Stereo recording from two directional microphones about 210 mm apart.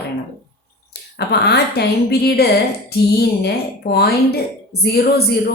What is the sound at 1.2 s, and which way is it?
Speech, 50° left (ahead or behind).